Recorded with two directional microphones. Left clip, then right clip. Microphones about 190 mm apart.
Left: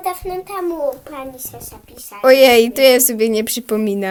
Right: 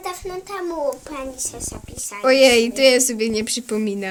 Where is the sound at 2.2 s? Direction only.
35° left (ahead or behind).